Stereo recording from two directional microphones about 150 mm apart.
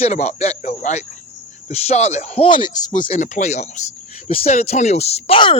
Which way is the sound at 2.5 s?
30° left (ahead or behind).